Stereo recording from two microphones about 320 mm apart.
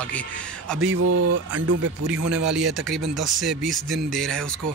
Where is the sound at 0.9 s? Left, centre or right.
Right.